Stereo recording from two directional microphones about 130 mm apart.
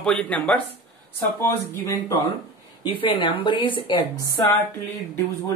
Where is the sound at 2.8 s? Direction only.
40° left (ahead or behind).